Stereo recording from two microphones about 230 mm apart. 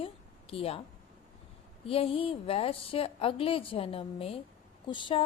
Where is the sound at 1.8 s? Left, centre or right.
Left.